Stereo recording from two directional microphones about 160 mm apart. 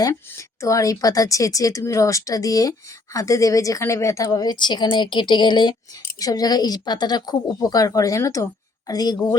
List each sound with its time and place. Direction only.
0.0 s speech: 20° left (ahead or behind)